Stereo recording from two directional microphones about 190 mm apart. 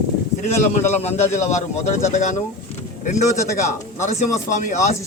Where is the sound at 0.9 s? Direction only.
35° left (ahead or behind).